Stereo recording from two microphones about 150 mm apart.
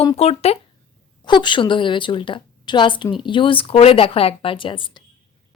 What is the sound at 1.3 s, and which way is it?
A woman's voice, 30° left (ahead or behind).